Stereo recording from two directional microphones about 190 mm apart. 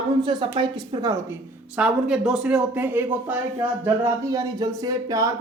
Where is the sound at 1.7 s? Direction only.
5° right (ahead or behind).